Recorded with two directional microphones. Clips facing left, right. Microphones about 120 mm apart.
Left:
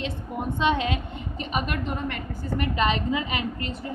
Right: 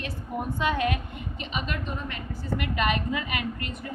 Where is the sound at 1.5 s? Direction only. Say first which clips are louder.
Left 4 dB; 55° left (ahead or behind).